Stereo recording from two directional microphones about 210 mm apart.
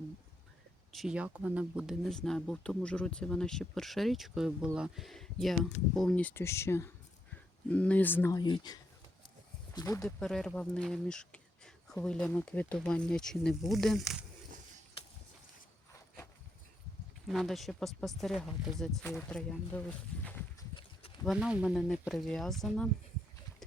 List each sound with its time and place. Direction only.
0.9 s speech: 5° right (ahead or behind); by 10.0 s 15° left (ahead or behind)
10.0 s speech: centre (ahead or behind)
17.2 s speech: centre (ahead or behind)
20.2 s boat: 10° left (ahead or behind)
21.2 s speech: 5° right (ahead or behind)